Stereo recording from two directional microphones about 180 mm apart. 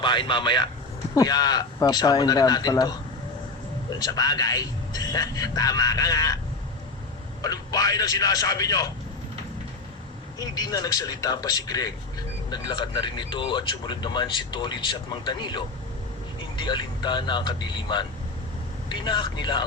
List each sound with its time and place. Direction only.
0.0 s speech: 25° left (ahead or behind)
7.4 s speech: 20° left (ahead or behind)
10.3 s speech: 20° left (ahead or behind)